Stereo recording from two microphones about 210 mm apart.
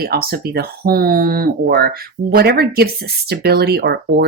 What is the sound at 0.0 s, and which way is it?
Speech, 45° right (ahead or behind).